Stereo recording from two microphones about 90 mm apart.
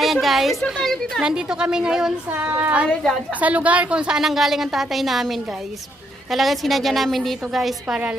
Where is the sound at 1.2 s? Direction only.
10° right (ahead or behind).